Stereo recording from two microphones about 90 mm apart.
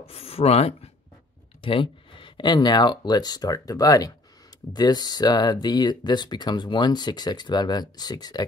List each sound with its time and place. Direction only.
0.0 s speech: 90° left
1.6 s speech: 75° left (ahead or behind); by 8.5 s 50° left (ahead or behind)